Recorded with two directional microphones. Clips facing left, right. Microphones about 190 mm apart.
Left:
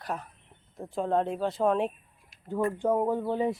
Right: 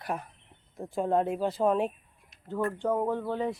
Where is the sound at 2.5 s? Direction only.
15° left (ahead or behind).